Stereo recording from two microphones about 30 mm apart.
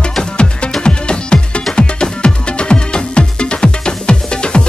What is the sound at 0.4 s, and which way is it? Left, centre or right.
Music, left.